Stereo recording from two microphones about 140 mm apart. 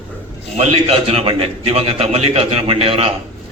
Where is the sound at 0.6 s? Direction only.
50° right (ahead or behind).